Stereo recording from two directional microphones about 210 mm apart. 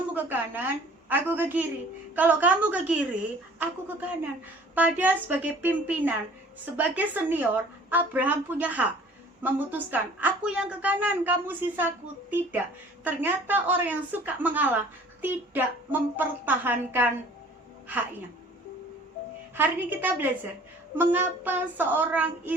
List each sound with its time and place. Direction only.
0.1 s a woman's voice: 10° right (ahead or behind)
19.5 s a woman's voice: 10° right (ahead or behind)